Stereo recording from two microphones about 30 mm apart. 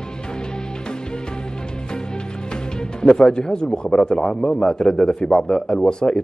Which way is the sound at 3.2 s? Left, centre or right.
Left.